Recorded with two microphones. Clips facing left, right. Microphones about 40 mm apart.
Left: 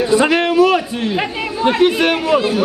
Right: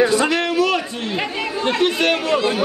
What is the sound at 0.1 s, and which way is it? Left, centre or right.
A man's voice, left.